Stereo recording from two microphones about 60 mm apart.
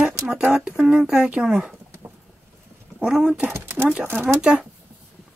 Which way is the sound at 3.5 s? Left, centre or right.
Right.